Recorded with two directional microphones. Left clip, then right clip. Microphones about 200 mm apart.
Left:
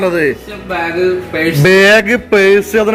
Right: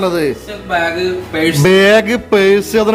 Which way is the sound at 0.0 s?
10° right (ahead or behind).